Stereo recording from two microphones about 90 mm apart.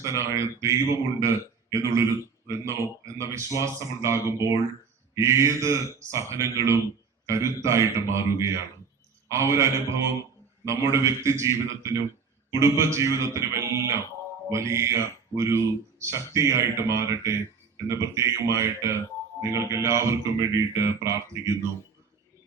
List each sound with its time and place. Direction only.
0.0 s speech: 35° right (ahead or behind)